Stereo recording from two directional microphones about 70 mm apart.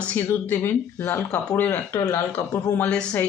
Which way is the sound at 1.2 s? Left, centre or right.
Centre.